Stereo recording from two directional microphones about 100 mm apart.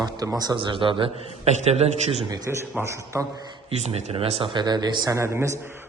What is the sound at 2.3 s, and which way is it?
Speech, 30° right (ahead or behind).